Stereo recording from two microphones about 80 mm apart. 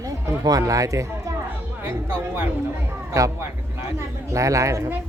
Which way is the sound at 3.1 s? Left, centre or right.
Right.